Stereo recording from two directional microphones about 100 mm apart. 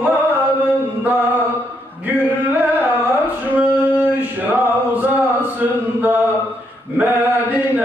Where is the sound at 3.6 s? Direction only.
15° right (ahead or behind).